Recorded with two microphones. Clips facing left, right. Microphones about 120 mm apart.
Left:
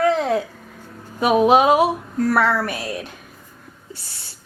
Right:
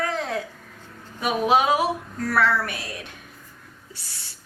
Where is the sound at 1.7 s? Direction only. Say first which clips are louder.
Left 6 dB; 25° left (ahead or behind).